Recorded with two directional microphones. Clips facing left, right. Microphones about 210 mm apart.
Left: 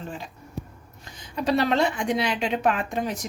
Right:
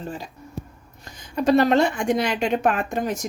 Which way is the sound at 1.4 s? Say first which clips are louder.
Right 5 dB; 45° right (ahead or behind).